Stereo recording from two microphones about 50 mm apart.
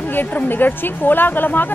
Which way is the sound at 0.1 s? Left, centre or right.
Left.